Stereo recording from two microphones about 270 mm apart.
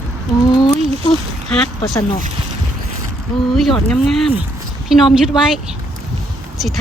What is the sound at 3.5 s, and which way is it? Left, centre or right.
Speech, centre.